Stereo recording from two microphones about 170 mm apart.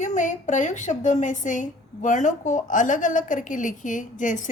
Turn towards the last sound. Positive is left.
turn(degrees=50)  # may be behind; listen again after turning